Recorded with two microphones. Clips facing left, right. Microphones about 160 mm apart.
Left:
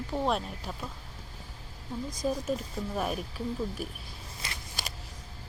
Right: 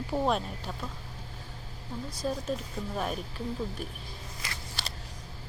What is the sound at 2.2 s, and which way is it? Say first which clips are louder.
Speech: left 2 dB; 10° left (ahead or behind).